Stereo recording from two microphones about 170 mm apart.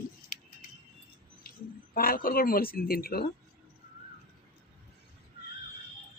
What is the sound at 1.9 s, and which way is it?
Speech, 60° left (ahead or behind).